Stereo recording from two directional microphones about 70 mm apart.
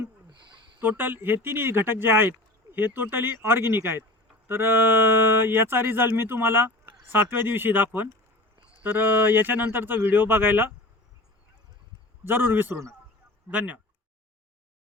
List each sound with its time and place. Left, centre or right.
0.8 s speech: right
12.2 s speech: right